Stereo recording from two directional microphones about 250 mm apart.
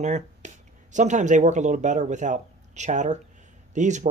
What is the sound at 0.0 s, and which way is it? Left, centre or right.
Speech, right.